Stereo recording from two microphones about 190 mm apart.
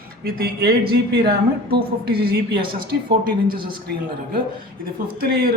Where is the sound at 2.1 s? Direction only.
55° right (ahead or behind).